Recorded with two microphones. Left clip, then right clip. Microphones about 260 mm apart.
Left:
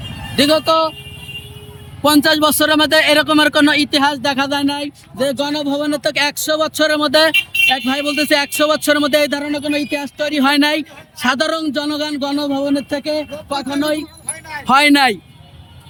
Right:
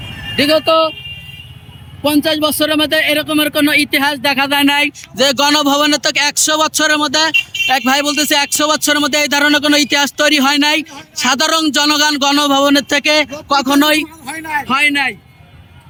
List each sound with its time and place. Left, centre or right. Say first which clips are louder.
0.3 s a man's voice: right 2 dB; centre
2.0 s a man's voice: left 2 dB; centre
4.6 s speech: right 8 dB; right
5.2 s a man's voice: right 7 dB; centre
9.6 s speech: right 8 dB; centre
10.4 s a man's voice: right 2 dB; centre
13.6 s speech: right 7 dB; centre
14.7 s speech: left 4 dB; centre